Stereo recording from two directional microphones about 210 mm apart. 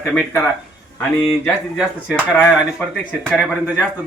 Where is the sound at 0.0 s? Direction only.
10° left (ahead or behind).